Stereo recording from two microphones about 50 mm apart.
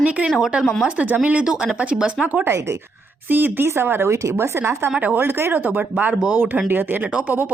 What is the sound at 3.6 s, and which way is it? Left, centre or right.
Speech, right.